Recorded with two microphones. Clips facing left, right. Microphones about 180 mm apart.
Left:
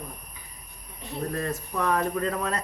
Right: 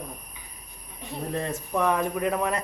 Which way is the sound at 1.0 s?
20° right (ahead or behind).